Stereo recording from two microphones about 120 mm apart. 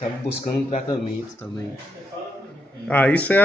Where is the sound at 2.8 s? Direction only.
10° left (ahead or behind).